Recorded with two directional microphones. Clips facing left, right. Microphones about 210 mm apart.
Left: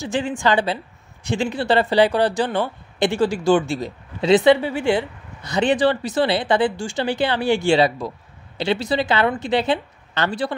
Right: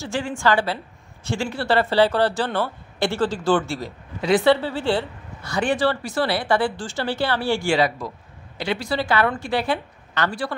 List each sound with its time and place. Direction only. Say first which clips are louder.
0.0 s a woman's voice: left 2 dB; 20° left (ahead or behind)